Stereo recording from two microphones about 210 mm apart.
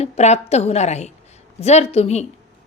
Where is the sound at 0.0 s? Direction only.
30° left (ahead or behind).